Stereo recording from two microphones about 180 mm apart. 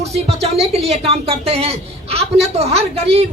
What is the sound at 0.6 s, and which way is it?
A man's voice, 35° right (ahead or behind).